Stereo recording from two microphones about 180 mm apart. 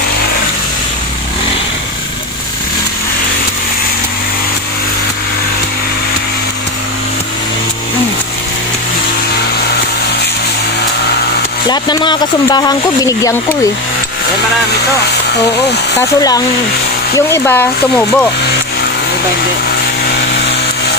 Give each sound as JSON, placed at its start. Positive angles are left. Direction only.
{"t": 11.6, "sound": "speech", "side_deg": 25}
{"t": 16.2, "sound": "speech", "side_deg": 20}